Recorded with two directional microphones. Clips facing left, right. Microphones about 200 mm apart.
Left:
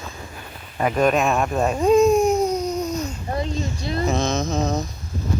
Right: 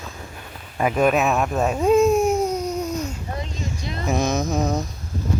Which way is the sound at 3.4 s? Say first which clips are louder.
Left 5 dB; 35° left (ahead or behind).